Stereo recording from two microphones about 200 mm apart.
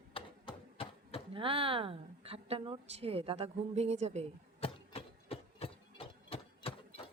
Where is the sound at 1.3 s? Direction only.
25° right (ahead or behind).